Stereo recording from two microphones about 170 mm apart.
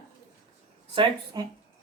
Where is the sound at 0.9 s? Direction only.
25° right (ahead or behind).